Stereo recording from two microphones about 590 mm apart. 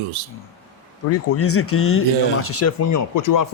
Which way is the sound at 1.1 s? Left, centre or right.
Left.